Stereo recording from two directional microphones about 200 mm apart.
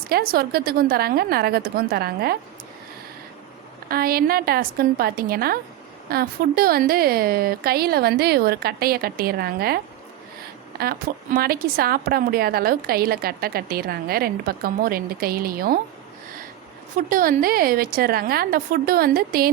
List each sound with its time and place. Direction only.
0.1 s a woman's voice: 50° right (ahead or behind)
3.8 s a woman's voice: 50° right (ahead or behind)
17.1 s a woman's voice: 45° right (ahead or behind)